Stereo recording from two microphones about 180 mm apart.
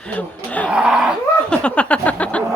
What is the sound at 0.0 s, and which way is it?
Speech, 10° left (ahead or behind).